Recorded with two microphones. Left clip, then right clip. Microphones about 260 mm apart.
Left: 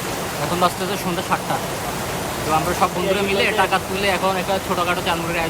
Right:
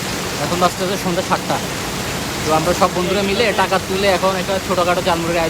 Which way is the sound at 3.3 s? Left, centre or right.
Centre.